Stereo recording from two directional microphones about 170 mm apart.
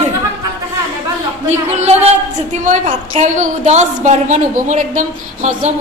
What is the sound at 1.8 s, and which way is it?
A woman's voice, 40° right (ahead or behind).